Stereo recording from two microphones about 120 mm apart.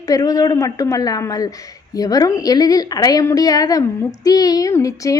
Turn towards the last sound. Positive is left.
turn(degrees=30)  # may be behind; listen again after turning